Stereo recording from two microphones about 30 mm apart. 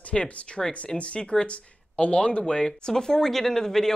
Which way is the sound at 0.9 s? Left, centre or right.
Left.